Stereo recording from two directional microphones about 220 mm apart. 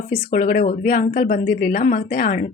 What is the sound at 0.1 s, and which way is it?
A woman's voice, 40° left (ahead or behind).